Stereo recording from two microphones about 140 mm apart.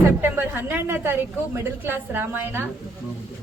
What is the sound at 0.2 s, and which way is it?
A woman's voice, 15° right (ahead or behind).